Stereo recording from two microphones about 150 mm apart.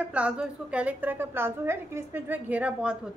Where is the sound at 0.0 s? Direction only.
10° right (ahead or behind).